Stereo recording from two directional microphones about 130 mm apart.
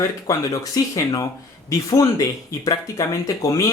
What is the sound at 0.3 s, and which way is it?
Speech, 25° left (ahead or behind).